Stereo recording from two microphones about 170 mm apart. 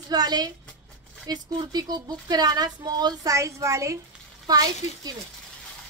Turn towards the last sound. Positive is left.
turn(degrees=-20)  # may be behind; listen again after turning